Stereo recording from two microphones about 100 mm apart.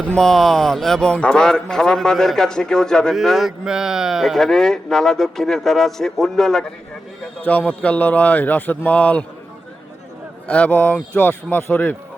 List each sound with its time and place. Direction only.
0.1 s speech: 5° left (ahead or behind)
7.4 s a man's voice: 15° left (ahead or behind)
10.4 s a man's voice: 15° left (ahead or behind)